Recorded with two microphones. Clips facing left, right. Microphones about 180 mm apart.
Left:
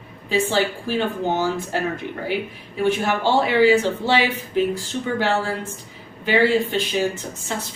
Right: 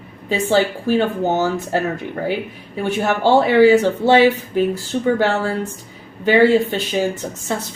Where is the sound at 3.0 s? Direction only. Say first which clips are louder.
Right 5 dB; 45° right (ahead or behind).